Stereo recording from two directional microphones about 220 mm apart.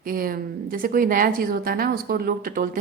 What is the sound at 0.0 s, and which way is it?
A woman's voice, 40° right (ahead or behind).